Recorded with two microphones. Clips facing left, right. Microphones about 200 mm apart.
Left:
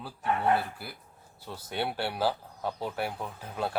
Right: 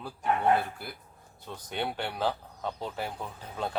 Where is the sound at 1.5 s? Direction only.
10° left (ahead or behind).